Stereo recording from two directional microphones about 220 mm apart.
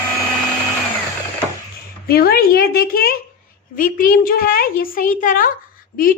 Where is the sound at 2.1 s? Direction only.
45° left (ahead or behind).